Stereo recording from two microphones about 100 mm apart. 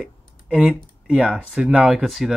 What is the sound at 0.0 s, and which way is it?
Speech, 5° right (ahead or behind).